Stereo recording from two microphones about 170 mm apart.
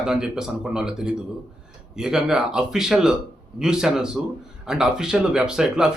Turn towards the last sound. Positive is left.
turn(degrees=-5)  # may be behind; listen again after turning